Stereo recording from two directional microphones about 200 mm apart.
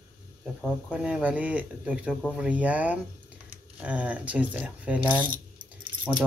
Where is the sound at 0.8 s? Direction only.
5° right (ahead or behind).